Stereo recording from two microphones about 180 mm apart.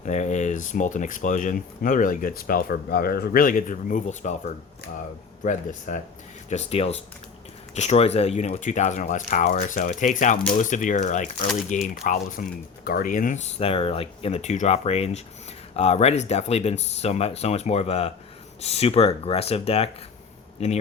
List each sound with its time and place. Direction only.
0.0 s speech: 40° left (ahead or behind)